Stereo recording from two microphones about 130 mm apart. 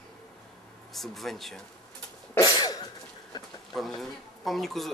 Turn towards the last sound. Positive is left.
turn(degrees=0)  # may be behind; listen again after turning